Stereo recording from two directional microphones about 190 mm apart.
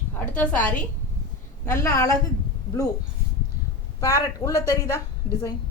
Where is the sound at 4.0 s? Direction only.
15° left (ahead or behind).